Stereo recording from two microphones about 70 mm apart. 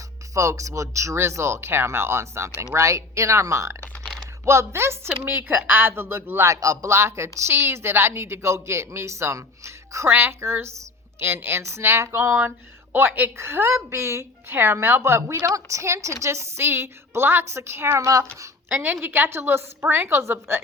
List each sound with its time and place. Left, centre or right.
0.3 s a woman's voice: right
6.5 s a woman's voice: right
10.1 s a woman's voice: right
17.9 s speech: right
18.7 s a woman's voice: right